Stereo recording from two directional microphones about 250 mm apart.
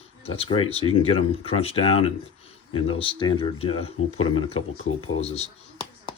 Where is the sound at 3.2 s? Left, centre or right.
Centre.